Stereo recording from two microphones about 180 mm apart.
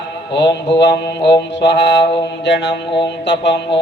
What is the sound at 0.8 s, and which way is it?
Mantra, 70° left (ahead or behind).